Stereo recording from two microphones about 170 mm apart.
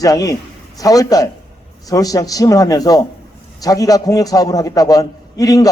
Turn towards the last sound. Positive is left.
turn(degrees=20)  # may be behind; listen again after turning